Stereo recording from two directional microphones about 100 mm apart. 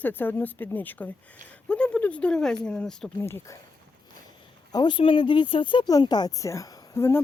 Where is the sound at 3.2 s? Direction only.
25° left (ahead or behind).